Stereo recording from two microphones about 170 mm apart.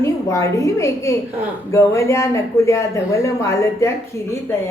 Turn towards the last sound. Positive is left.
turn(degrees=15)  # may be behind; listen again after turning